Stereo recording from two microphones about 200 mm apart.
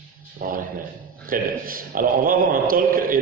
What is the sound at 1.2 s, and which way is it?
A man's voice, 45° right (ahead or behind).